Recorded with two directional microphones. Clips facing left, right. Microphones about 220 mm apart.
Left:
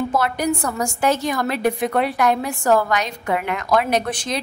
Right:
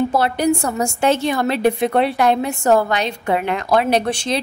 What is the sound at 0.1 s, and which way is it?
A woman's voice, 30° right (ahead or behind).